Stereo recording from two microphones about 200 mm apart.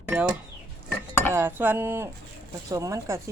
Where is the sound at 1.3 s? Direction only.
10° right (ahead or behind).